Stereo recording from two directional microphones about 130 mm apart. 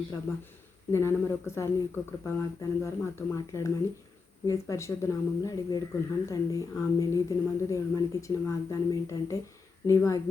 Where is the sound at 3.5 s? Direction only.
20° left (ahead or behind).